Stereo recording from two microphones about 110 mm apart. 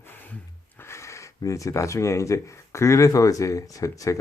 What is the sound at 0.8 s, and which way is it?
Speech, 25° left (ahead or behind).